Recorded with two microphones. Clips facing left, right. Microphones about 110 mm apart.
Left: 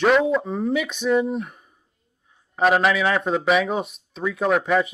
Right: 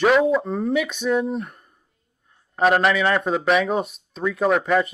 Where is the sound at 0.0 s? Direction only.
Centre (ahead or behind).